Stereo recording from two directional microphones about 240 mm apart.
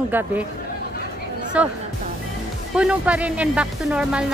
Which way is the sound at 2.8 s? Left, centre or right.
Centre.